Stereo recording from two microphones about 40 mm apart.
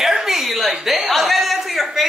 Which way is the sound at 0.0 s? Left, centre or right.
Centre.